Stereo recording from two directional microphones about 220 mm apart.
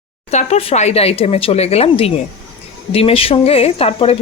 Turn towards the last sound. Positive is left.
turn(degrees=25)  # may be behind; listen again after turning